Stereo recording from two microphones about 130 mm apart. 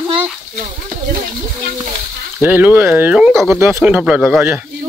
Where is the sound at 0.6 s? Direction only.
75° right (ahead or behind).